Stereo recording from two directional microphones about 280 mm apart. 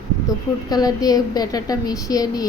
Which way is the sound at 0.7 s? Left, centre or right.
Centre.